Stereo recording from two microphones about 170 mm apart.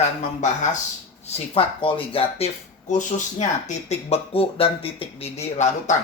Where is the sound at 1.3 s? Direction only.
30° left (ahead or behind).